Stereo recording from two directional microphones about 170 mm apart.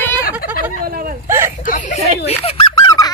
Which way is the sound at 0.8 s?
60° right (ahead or behind).